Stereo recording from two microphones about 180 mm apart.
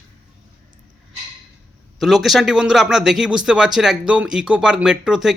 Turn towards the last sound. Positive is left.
turn(degrees=-5)  # may be behind; listen again after turning